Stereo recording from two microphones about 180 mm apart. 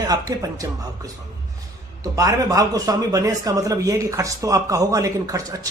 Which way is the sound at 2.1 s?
20° right (ahead or behind).